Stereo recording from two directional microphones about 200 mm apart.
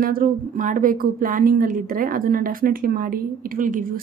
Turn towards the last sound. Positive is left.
turn(degrees=-40)  # may be behind; listen again after turning